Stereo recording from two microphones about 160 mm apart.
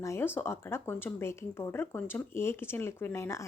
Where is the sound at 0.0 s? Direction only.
15° left (ahead or behind).